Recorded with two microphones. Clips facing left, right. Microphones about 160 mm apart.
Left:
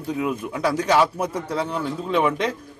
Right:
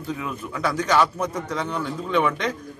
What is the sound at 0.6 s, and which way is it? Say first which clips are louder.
Speech: left 2 dB; 35° left (ahead or behind).